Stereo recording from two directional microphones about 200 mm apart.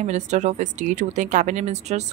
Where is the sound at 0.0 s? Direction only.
35° right (ahead or behind).